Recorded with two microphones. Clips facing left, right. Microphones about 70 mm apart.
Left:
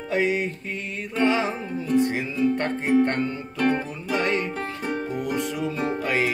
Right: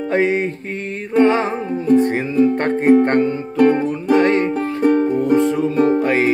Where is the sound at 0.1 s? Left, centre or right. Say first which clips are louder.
Right 5 dB; right.